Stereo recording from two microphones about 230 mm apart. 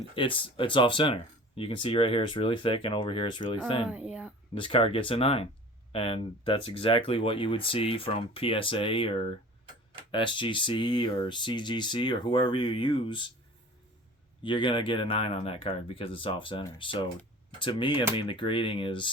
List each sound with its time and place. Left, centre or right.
0.2 s speech: left
3.8 s speech: centre
4.5 s speech: left
14.4 s speech: left